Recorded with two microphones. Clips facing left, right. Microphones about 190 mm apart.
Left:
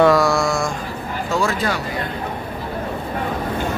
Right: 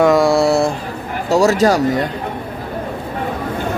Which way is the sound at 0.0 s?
25° right (ahead or behind).